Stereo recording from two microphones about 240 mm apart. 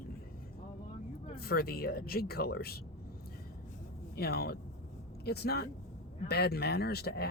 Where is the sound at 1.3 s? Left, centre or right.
Left.